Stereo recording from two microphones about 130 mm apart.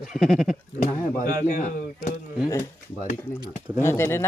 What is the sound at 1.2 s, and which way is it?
Speech, 75° left (ahead or behind).